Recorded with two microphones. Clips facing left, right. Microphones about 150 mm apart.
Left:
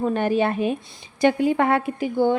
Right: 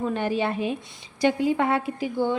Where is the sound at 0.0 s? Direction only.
50° left (ahead or behind).